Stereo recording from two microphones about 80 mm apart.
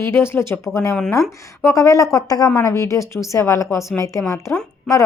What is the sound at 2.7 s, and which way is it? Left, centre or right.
Speech, left.